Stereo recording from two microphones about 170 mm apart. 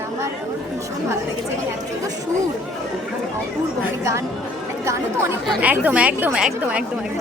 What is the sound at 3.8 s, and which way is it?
A woman's voice, 15° right (ahead or behind).